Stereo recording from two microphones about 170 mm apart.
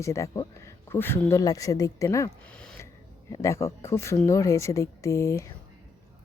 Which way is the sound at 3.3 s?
15° left (ahead or behind).